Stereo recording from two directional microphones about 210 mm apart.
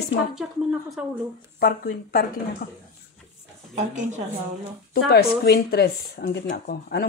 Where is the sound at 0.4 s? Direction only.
5° right (ahead or behind).